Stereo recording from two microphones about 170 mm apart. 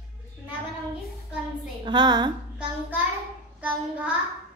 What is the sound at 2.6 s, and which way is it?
Child singing, 10° right (ahead or behind).